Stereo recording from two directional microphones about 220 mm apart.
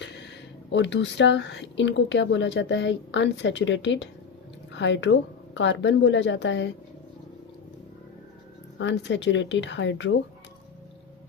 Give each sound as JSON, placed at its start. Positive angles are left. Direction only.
{"t": 0.7, "sound": "speech", "side_deg": 55}
{"t": 8.8, "sound": "speech", "side_deg": 55}